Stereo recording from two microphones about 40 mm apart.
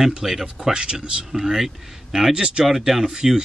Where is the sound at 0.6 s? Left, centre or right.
Right.